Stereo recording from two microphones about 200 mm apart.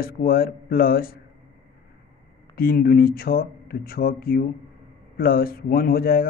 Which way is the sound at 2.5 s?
50° left (ahead or behind).